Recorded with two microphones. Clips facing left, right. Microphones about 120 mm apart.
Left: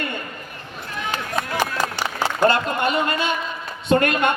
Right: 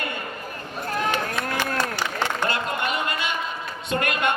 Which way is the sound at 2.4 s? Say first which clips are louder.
Left 7 dB; 35° left (ahead or behind).